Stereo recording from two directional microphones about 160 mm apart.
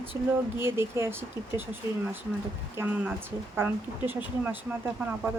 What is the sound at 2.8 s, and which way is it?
Speech, 10° right (ahead or behind).